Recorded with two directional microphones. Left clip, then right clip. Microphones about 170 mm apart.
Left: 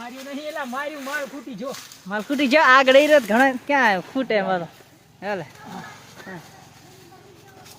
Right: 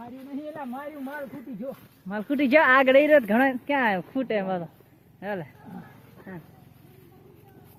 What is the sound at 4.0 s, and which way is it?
Speech, 20° left (ahead or behind).